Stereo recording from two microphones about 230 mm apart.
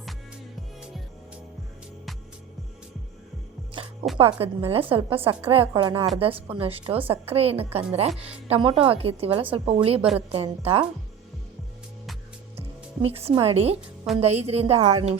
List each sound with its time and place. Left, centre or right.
4.2 s a woman's voice: right
12.5 s a woman's voice: right